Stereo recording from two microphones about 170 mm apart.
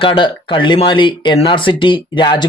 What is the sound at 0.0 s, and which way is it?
Speech, 30° left (ahead or behind).